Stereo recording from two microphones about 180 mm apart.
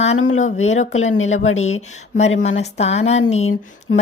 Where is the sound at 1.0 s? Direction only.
90° left.